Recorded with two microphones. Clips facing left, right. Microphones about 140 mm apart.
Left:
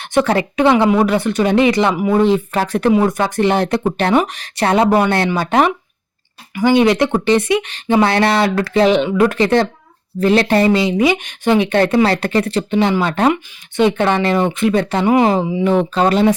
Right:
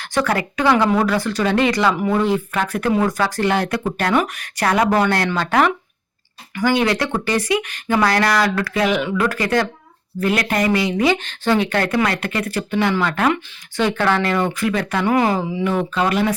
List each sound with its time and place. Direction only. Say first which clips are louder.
0.0 s speech: left 5 dB; 25° left (ahead or behind)